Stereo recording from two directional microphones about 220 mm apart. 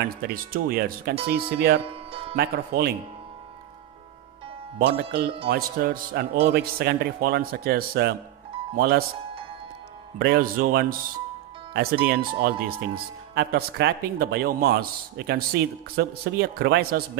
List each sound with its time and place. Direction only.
0.0 s speech: 40° right (ahead or behind)
1.9 s music: 25° right (ahead or behind)
2.3 s speech: 45° right (ahead or behind)
4.7 s speech: 45° right (ahead or behind)
10.1 s speech: 40° right (ahead or behind)